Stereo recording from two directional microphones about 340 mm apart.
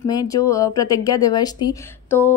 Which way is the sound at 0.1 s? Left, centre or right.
Centre.